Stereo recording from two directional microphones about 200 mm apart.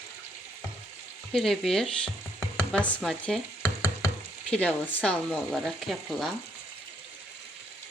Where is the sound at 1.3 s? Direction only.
Centre (ahead or behind).